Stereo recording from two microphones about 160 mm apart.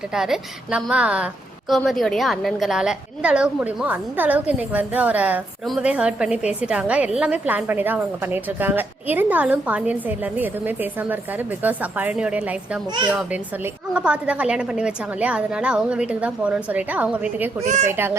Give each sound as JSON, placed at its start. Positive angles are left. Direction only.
{"t": 0.1, "sound": "a woman's voice", "side_deg": -5}
{"t": 13.9, "sound": "a woman's voice", "side_deg": -5}
{"t": 17.7, "sound": "speech", "side_deg": -50}
{"t": 17.9, "sound": "a woman's voice", "side_deg": -15}